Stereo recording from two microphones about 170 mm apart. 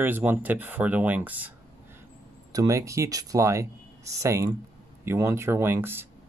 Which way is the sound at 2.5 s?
20° right (ahead or behind).